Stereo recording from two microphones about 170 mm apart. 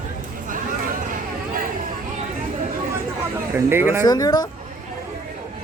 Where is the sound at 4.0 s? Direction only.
25° left (ahead or behind).